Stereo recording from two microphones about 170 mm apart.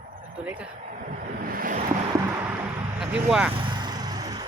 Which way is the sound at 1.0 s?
55° right (ahead or behind).